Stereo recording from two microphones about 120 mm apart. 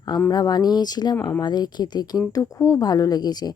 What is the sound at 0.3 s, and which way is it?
Speech, 35° left (ahead or behind).